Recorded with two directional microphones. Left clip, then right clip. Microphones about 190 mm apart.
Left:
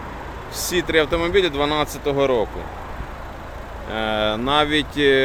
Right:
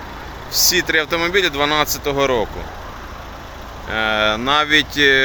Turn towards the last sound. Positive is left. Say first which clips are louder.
# right 4 dB
turn(degrees=0)  # may be behind; listen again after turning